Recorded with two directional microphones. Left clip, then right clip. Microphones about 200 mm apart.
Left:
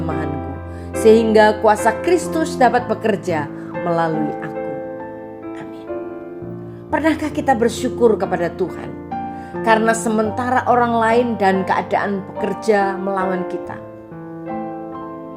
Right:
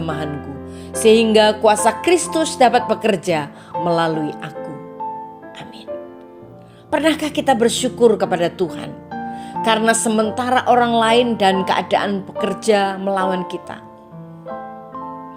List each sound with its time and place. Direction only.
0.0 s music: 30° right (ahead or behind)
0.9 s a woman's voice: 25° right (ahead or behind)
6.9 s a woman's voice: 30° right (ahead or behind)